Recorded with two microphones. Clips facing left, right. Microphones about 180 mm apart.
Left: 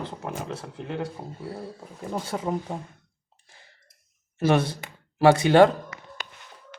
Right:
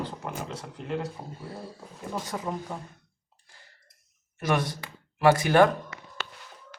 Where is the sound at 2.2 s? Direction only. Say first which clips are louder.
Left 4 dB; 25° left (ahead or behind).